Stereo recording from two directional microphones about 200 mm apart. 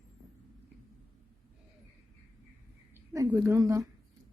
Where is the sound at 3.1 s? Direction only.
15° right (ahead or behind).